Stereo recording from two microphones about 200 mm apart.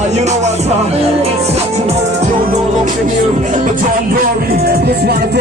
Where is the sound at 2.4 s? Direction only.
45° right (ahead or behind).